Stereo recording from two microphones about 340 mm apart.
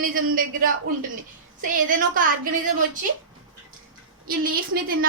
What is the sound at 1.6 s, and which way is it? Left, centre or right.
A woman's voice, right.